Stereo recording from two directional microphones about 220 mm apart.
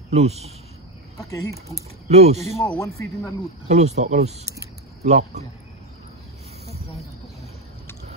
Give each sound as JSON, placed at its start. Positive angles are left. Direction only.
{"t": 0.1, "sound": "speech", "side_deg": -30}
{"t": 2.0, "sound": "speech", "side_deg": -30}
{"t": 2.4, "sound": "speech", "side_deg": 5}
{"t": 3.6, "sound": "speech", "side_deg": -30}